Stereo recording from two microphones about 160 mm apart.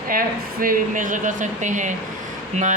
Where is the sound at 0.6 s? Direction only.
60° right (ahead or behind).